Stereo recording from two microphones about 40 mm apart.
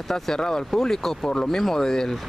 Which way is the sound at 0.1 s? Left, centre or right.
Centre.